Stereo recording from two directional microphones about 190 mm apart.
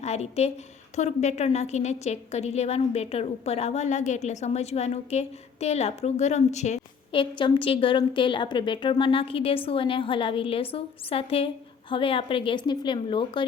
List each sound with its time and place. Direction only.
0.0 s a woman's voice: 35° left (ahead or behind)